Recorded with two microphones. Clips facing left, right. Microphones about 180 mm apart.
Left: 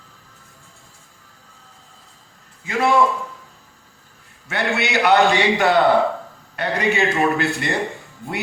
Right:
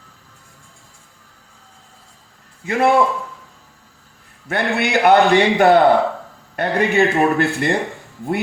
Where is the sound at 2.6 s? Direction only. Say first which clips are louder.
Right 4 dB; 55° right (ahead or behind).